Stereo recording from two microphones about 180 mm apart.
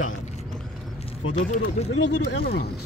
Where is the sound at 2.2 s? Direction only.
60° left (ahead or behind).